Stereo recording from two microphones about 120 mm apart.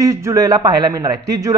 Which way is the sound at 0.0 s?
25° right (ahead or behind).